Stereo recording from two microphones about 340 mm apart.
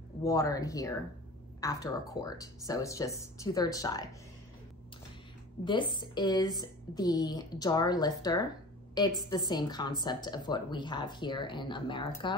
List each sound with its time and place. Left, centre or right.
0.2 s speech: centre
5.7 s speech: centre